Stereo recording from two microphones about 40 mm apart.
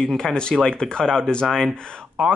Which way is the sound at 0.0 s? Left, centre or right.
Centre.